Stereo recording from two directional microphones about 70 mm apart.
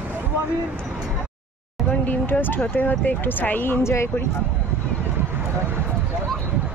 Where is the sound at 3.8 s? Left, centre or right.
Left.